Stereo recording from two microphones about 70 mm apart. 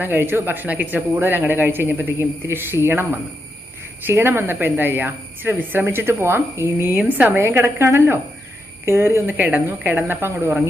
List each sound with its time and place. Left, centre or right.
0.0 s a woman's voice: right
6.9 s speech: right
7.3 s a woman's voice: right